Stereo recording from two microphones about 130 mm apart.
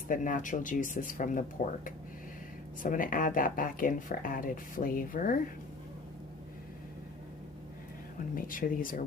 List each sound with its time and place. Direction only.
0.1 s speech: 85° left
8.4 s speech: 90° left